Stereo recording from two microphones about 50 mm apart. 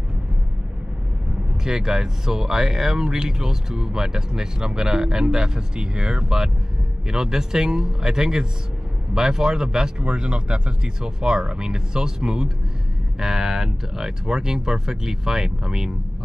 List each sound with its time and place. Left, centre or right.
1.6 s speech: centre